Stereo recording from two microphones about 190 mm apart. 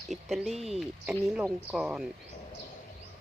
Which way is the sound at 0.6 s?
35° right (ahead or behind).